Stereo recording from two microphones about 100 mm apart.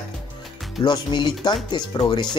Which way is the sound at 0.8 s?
50° left (ahead or behind).